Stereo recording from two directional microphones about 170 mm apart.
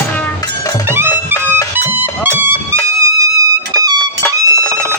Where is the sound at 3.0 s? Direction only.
20° right (ahead or behind).